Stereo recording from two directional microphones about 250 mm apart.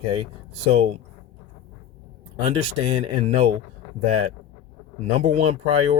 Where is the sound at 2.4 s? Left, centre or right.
Right.